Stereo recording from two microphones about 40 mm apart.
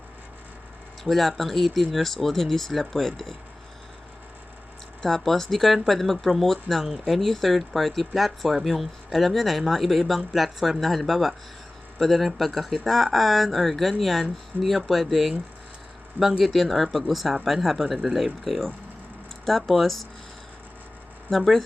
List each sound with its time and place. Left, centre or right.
1.0 s speech: centre
5.0 s speech: centre
16.4 s speech: centre
21.2 s speech: centre